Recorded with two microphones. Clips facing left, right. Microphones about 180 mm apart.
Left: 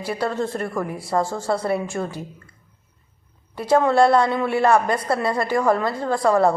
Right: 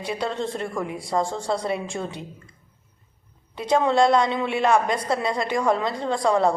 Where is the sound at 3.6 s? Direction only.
15° right (ahead or behind).